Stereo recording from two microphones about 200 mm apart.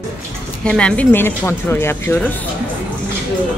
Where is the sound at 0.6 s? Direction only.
5° left (ahead or behind).